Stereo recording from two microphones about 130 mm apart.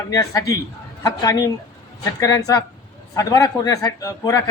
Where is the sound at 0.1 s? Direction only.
25° left (ahead or behind).